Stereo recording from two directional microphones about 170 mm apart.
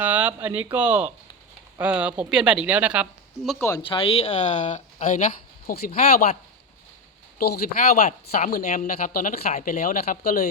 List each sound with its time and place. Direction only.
0.0 s speech: 10° right (ahead or behind)
3.8 s speech: 30° left (ahead or behind); by 6.3 s 55° left (ahead or behind)
7.3 s speech: 65° left (ahead or behind)